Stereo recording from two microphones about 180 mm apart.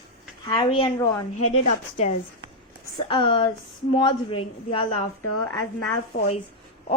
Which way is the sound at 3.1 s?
30° left (ahead or behind).